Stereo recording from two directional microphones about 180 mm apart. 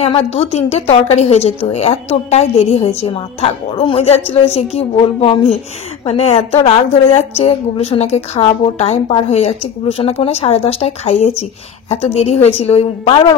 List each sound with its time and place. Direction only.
0.0 s a woman's voice: 35° left (ahead or behind)